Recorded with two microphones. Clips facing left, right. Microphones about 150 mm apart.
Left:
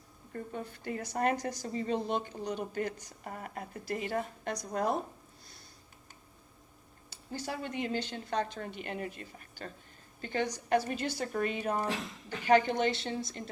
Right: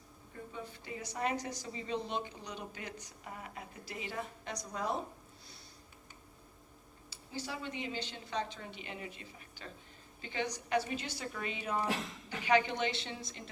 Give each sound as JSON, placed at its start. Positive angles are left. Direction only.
{"t": 0.3, "sound": "a woman's voice", "side_deg": 55}
{"t": 7.1, "sound": "a woman's voice", "side_deg": 50}